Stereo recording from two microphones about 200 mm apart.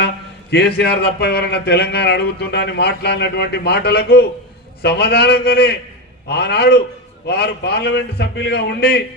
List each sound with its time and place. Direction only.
0.5 s speech: 55° left (ahead or behind)